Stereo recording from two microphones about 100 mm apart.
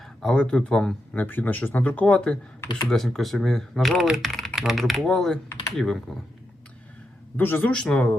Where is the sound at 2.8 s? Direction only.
5° left (ahead or behind).